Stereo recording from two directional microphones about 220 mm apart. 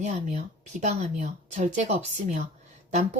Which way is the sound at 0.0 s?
30° right (ahead or behind).